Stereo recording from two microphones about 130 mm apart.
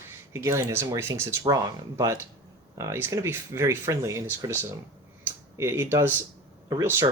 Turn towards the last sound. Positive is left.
turn(degrees=-25)  # may be behind; listen again after turning